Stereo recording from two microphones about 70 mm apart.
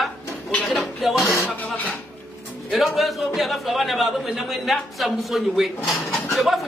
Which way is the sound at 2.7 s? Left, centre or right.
Centre.